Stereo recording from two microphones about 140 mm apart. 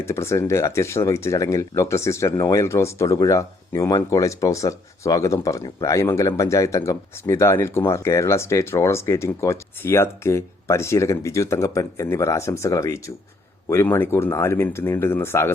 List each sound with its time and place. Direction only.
0.0 s speech: 20° left (ahead or behind)